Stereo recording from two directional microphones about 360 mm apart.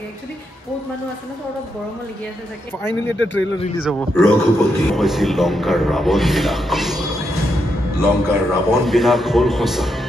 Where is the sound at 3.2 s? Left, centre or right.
Left.